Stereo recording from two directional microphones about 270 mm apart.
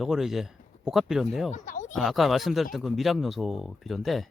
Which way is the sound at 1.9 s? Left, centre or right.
Centre.